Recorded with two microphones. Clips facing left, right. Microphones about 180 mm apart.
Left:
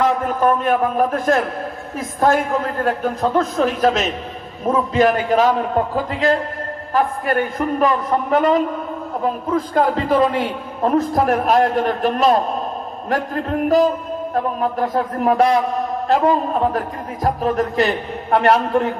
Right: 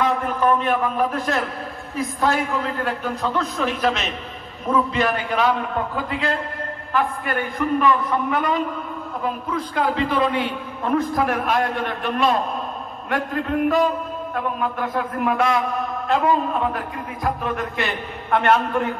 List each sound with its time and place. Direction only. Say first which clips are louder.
0.0 s a man's voice: left 3 dB; 45° left (ahead or behind)